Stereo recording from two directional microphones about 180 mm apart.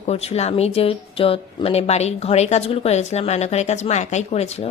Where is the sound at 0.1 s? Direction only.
35° left (ahead or behind).